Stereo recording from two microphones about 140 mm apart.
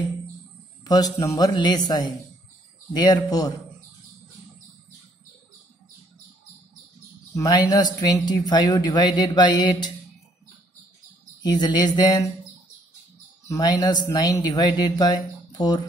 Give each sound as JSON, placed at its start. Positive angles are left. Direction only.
{"t": 0.8, "sound": "speech", "side_deg": 25}
{"t": 7.3, "sound": "speech", "side_deg": 30}
{"t": 11.4, "sound": "speech", "side_deg": 30}
{"t": 13.5, "sound": "speech", "side_deg": 30}